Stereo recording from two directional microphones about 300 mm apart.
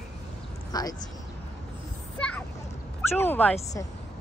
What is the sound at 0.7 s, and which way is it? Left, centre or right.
Speech, centre.